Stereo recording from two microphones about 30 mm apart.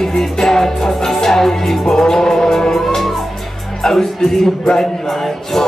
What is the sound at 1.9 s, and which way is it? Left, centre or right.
Music, left.